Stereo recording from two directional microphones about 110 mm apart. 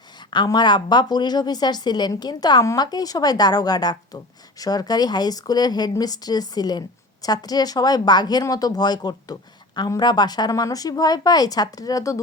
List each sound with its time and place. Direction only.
0.3 s speech: 40° left (ahead or behind)